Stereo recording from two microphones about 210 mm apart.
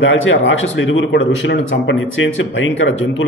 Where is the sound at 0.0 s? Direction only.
65° left (ahead or behind).